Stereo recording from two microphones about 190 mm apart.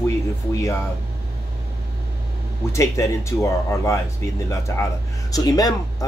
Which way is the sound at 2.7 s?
15° left (ahead or behind).